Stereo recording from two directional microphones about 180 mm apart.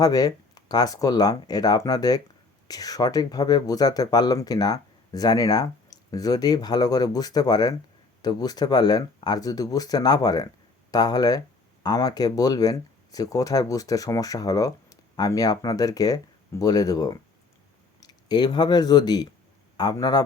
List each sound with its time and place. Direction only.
0.0 s speech: 20° left (ahead or behind)